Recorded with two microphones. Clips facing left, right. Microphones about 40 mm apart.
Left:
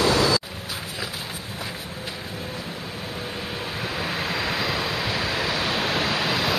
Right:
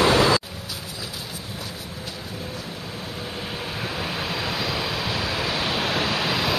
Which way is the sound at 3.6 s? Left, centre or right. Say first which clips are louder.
Left 1 dB; centre.